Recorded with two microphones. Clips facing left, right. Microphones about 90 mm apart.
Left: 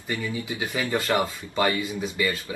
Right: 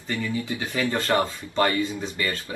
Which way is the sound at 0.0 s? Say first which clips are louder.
Right 2 dB; 15° left (ahead or behind).